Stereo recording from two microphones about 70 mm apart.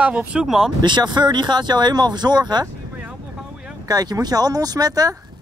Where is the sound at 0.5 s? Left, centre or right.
Centre.